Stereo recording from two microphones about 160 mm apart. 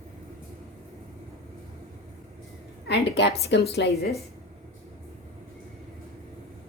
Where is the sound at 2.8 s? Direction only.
90° left.